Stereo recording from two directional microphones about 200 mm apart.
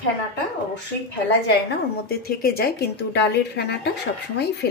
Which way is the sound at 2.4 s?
50° left (ahead or behind).